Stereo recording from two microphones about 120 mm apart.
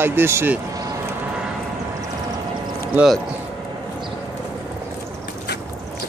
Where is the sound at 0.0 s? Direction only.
20° right (ahead or behind).